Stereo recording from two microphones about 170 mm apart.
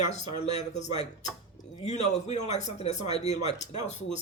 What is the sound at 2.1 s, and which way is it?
Speech, 40° left (ahead or behind).